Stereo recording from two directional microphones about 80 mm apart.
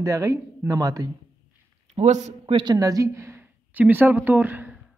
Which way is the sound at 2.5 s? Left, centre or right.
Right.